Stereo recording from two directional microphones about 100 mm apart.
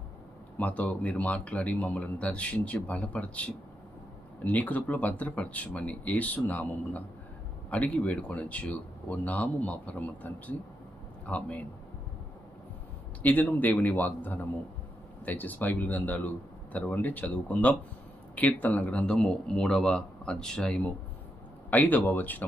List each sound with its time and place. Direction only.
0.5 s speech: 15° left (ahead or behind)
13.2 s speech: 15° left (ahead or behind)